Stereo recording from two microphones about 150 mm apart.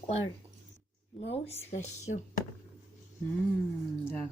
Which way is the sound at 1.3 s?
45° left (ahead or behind).